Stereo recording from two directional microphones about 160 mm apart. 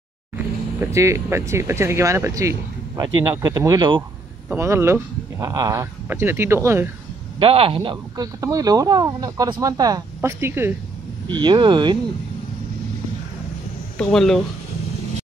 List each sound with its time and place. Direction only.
0.7 s speech: 20° right (ahead or behind)
7.3 s speech: 35° right (ahead or behind); by 10.7 s 15° right (ahead or behind)
11.2 s speech: 30° right (ahead or behind)
13.9 s speech: 5° left (ahead or behind)